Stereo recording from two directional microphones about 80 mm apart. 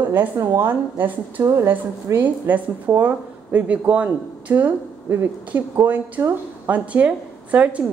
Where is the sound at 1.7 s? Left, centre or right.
Right.